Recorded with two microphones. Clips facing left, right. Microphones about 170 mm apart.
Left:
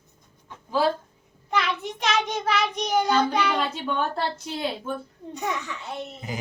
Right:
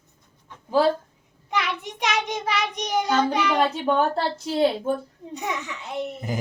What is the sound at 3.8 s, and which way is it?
Speech, 35° right (ahead or behind).